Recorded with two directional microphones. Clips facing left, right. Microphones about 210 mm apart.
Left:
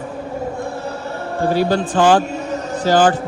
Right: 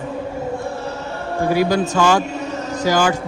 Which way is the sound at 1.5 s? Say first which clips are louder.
Even; 10° right (ahead or behind).